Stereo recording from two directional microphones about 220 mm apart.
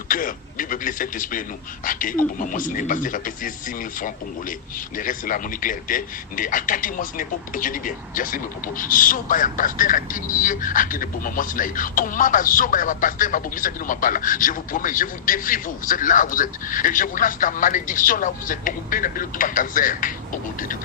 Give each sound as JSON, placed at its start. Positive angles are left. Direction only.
{"t": 0.1, "sound": "a man's voice", "side_deg": 40}
{"t": 4.9, "sound": "a man's voice", "side_deg": 40}